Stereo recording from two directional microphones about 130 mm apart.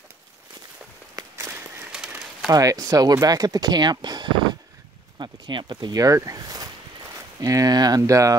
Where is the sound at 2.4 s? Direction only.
25° right (ahead or behind).